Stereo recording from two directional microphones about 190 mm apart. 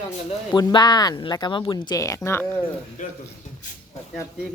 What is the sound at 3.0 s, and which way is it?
Speech, 45° left (ahead or behind).